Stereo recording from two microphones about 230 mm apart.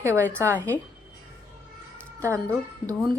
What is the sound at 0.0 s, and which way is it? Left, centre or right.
Speech, centre.